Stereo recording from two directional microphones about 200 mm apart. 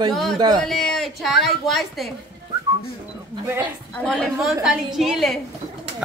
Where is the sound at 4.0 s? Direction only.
5° left (ahead or behind).